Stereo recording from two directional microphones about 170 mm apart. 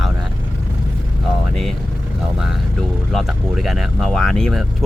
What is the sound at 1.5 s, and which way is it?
Speech, centre (ahead or behind).